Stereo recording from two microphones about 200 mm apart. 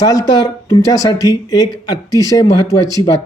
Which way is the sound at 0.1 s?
20° left (ahead or behind).